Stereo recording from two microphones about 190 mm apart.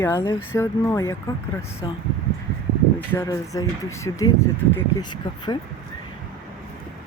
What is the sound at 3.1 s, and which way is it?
Speech, 15° left (ahead or behind).